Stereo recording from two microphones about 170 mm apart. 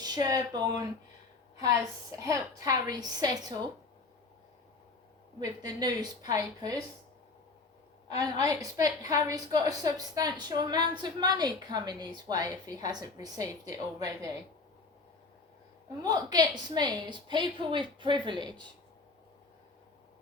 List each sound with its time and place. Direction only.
0.0 s a woman's voice: 25° right (ahead or behind)
2.1 s a woman's voice: 20° right (ahead or behind)
5.4 s a woman's voice: 25° right (ahead or behind)
8.2 s a woman's voice: 20° right (ahead or behind)
16.0 s a woman's voice: 25° right (ahead or behind)